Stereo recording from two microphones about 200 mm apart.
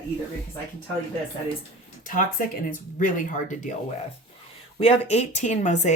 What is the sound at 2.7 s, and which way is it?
Speech, 40° left (ahead or behind).